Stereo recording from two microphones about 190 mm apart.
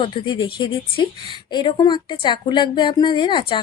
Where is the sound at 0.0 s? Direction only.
25° left (ahead or behind).